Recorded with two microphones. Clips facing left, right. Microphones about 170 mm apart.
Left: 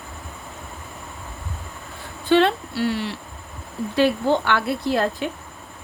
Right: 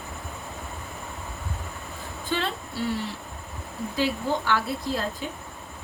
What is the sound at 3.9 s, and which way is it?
A woman's voice, 70° left (ahead or behind).